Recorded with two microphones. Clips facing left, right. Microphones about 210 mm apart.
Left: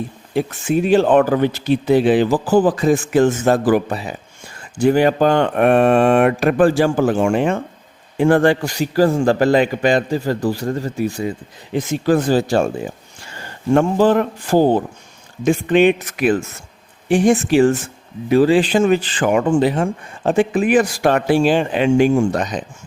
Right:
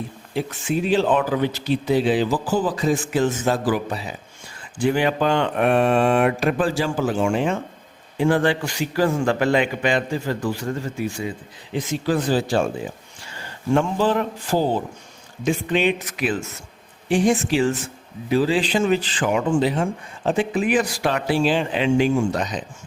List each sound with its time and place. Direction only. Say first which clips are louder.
0.3 s speech: left 6 dB; 50° left (ahead or behind)
4.8 s a man's voice: left 6 dB; 45° left (ahead or behind)
13.7 s speech: left 6 dB; 50° left (ahead or behind)